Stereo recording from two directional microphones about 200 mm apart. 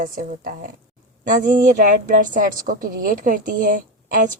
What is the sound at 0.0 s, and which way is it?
A woman's voice, 40° right (ahead or behind).